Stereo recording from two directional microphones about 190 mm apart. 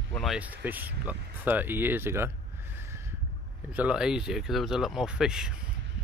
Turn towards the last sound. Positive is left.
turn(degrees=-5)  # may be behind; listen again after turning